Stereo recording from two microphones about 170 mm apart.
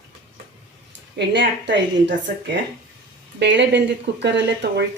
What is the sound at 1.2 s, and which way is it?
A woman's voice, 90° right.